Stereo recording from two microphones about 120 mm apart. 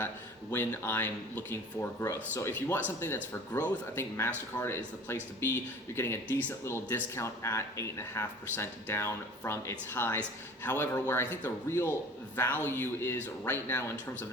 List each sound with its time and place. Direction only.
0.5 s speech: 15° left (ahead or behind)